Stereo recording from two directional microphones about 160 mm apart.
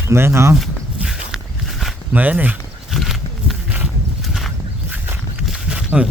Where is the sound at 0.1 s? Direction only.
15° right (ahead or behind).